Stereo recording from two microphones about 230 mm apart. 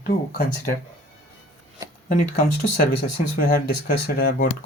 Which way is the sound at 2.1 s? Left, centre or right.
Left.